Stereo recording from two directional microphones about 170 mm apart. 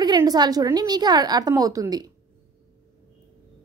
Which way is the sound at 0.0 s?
25° right (ahead or behind).